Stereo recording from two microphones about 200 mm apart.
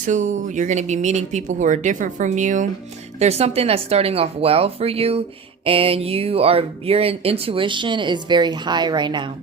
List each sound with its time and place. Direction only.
0.0 s speech: 40° right (ahead or behind); by 9.3 s 20° right (ahead or behind)